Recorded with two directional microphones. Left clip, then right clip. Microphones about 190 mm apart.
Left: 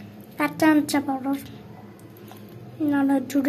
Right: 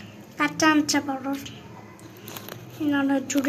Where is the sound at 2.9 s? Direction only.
30° left (ahead or behind).